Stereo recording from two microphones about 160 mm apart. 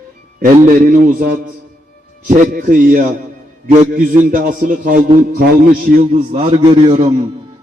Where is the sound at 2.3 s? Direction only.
55° right (ahead or behind).